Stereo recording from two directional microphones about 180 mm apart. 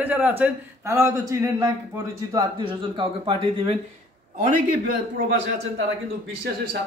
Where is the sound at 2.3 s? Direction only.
25° right (ahead or behind).